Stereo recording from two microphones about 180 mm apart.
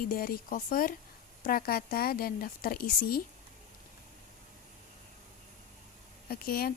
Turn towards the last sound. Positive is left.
turn(degrees=55)  # may be behind; listen again after turning